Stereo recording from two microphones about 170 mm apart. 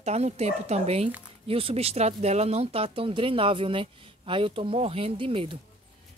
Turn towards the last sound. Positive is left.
turn(degrees=-30)  # may be behind; listen again after turning